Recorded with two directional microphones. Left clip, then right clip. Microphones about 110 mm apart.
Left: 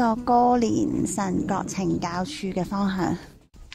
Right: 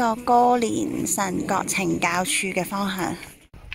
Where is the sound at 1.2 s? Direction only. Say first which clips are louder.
Right 3 dB; 15° left (ahead or behind).